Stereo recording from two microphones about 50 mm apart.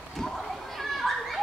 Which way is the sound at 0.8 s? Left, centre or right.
Centre.